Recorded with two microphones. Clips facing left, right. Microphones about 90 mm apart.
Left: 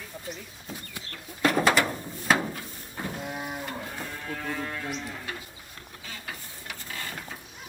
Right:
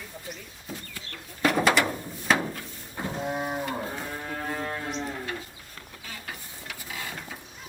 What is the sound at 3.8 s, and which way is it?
Cattle, 20° right (ahead or behind).